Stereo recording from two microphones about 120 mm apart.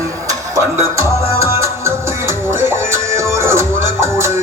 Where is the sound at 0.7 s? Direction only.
25° right (ahead or behind).